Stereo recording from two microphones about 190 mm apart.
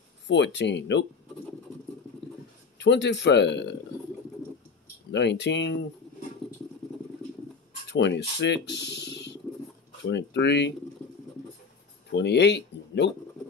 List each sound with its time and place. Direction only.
0.3 s speech: 65° left (ahead or behind)
2.8 s speech: 65° left (ahead or behind)
5.1 s speech: 65° left (ahead or behind)
7.9 s speech: 65° left (ahead or behind)
12.1 s speech: 65° left (ahead or behind)